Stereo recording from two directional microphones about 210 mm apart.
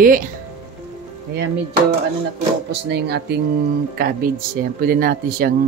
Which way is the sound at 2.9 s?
50° right (ahead or behind).